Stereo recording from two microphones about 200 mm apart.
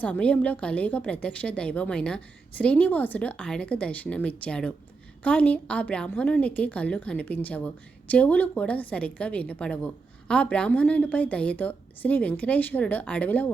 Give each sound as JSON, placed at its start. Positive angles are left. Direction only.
{"t": 0.0, "sound": "a woman's voice", "side_deg": 5}